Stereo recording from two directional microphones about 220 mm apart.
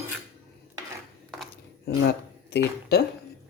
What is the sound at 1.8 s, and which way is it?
Speech, 50° left (ahead or behind).